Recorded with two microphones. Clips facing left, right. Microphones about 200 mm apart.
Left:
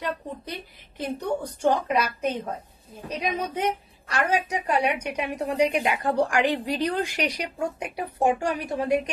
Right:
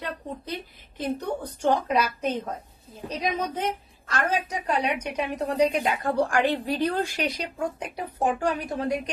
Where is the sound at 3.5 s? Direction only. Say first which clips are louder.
Left 2 dB; 10° left (ahead or behind).